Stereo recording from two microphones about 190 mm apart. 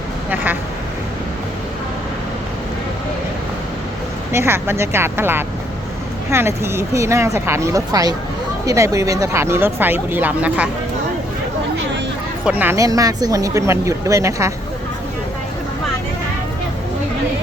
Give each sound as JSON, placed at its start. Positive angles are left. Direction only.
{"t": 4.3, "sound": "speech", "side_deg": -15}
{"t": 12.5, "sound": "speech", "side_deg": -10}